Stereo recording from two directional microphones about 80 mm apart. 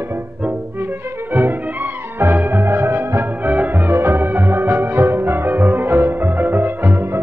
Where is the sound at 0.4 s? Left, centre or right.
Right.